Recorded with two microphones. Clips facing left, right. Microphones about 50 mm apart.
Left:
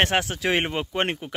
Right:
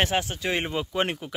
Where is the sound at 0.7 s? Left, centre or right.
Left.